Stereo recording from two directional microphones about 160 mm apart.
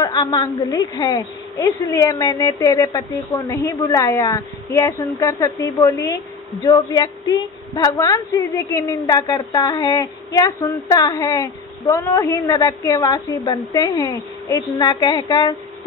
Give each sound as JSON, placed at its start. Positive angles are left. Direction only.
{"t": 0.3, "sound": "a woman's voice", "side_deg": 20}